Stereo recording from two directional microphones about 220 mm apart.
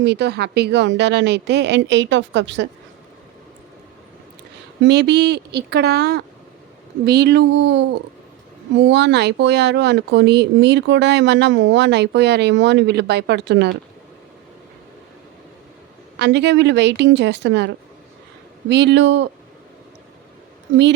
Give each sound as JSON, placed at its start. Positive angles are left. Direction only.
{"t": 0.0, "sound": "speech", "side_deg": -50}
{"t": 4.8, "sound": "speech", "side_deg": -50}
{"t": 16.1, "sound": "speech", "side_deg": -50}
{"t": 18.7, "sound": "speech", "side_deg": -50}